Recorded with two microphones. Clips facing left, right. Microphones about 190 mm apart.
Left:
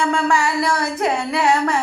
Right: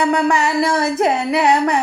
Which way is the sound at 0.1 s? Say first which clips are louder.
Right 3 dB; 20° right (ahead or behind).